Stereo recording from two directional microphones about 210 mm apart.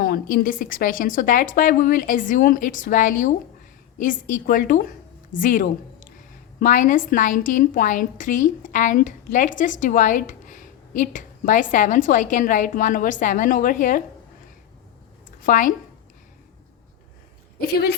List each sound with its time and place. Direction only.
0.0 s a woman's voice: 45° left (ahead or behind)
15.4 s a woman's voice: 40° left (ahead or behind)